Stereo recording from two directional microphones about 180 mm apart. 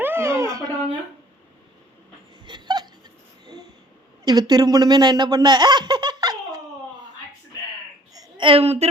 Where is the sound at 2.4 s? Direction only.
25° right (ahead or behind).